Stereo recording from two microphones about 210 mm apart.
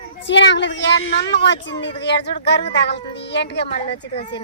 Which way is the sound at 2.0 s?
55° left (ahead or behind).